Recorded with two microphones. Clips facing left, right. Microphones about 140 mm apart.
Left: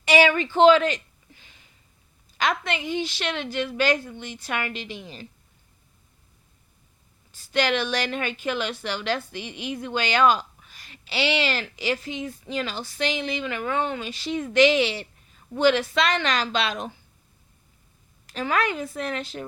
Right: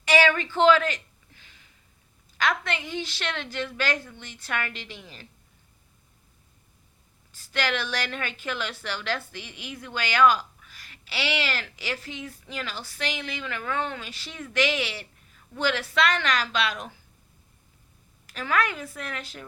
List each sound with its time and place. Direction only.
0.0 s a sound: 15° left (ahead or behind)
2.4 s a woman's voice: 15° left (ahead or behind)
7.5 s a woman's voice: 20° left (ahead or behind)
18.3 s a woman's voice: 25° left (ahead or behind)